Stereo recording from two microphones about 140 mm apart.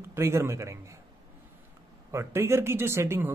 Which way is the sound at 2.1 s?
20° right (ahead or behind).